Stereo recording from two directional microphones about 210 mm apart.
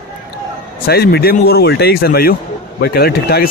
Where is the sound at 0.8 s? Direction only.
50° left (ahead or behind).